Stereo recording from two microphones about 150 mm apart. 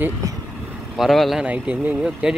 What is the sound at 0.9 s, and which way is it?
Speech, centre (ahead or behind).